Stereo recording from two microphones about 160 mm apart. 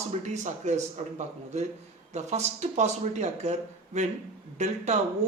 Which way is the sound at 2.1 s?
45° right (ahead or behind).